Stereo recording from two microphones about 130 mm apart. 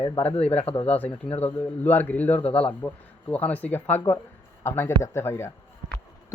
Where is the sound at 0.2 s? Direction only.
50° left (ahead or behind).